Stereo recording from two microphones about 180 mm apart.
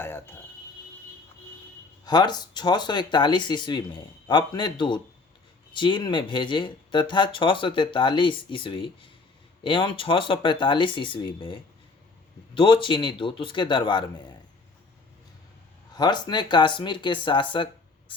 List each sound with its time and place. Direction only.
0.0 s speech: 10° left (ahead or behind)
2.0 s speech: 25° left (ahead or behind)
16.0 s speech: 25° left (ahead or behind)